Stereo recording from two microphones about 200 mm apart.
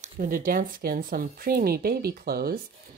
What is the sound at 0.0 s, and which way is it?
Speech, 40° right (ahead or behind).